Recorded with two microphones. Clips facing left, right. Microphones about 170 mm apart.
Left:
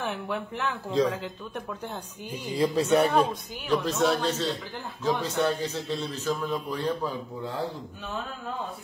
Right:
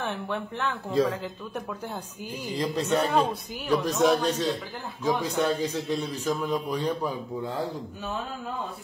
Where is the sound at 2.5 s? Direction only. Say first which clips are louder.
Left 4 dB; 10° left (ahead or behind).